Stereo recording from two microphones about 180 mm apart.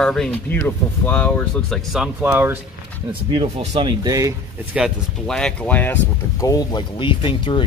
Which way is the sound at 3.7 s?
25° right (ahead or behind).